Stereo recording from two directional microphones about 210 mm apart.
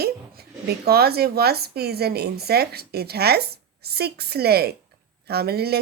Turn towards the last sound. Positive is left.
turn(degrees=-50)  # may be behind; listen again after turning